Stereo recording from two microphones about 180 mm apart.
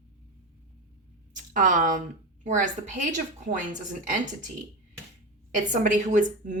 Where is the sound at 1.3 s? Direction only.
45° right (ahead or behind).